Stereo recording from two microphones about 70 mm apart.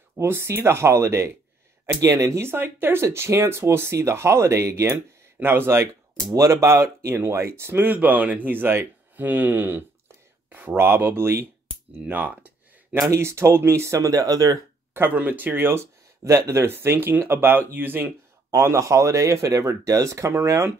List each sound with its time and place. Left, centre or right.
0.2 s speech: right
2.0 s speech: right
2.4 s speech: right
7.9 s speech: right
12.1 s speech: right
13.1 s speech: right
15.0 s speech: right